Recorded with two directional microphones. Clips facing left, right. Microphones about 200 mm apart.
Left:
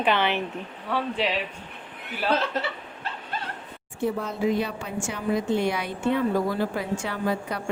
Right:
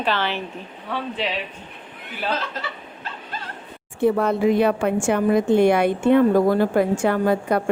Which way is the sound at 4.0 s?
65° right (ahead or behind).